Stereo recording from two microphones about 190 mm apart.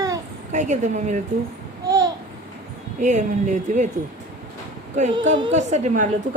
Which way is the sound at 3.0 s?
40° right (ahead or behind).